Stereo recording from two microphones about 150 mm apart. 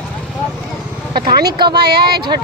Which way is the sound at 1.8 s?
90° right.